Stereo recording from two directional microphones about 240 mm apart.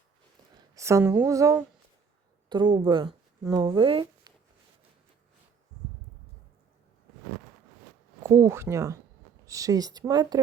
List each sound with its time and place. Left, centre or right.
0.8 s speech: centre
8.2 s speech: centre